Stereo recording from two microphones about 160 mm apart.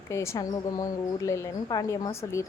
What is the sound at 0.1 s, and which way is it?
Speech, 20° left (ahead or behind).